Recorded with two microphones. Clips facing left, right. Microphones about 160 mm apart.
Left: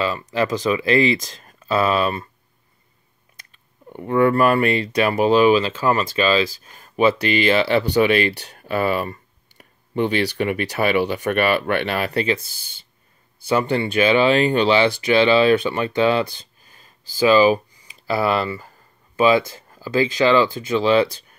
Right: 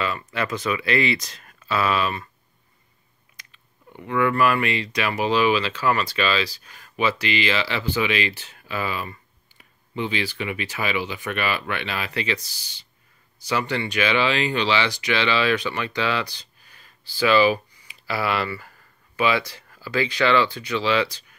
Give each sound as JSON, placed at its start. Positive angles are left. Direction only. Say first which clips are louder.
{"t": 0.0, "sound": "speech", "louder": "left 5 dB", "side_deg": 35}
{"t": 3.9, "sound": "speech", "louder": "left 6 dB", "side_deg": 40}
{"t": 13.7, "sound": "speech", "louder": "left 6 dB", "side_deg": 45}